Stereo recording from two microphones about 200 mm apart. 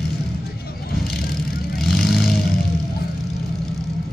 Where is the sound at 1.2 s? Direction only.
50° left (ahead or behind).